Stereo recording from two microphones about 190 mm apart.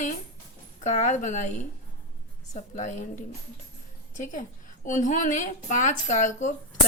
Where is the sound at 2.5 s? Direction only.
40° left (ahead or behind).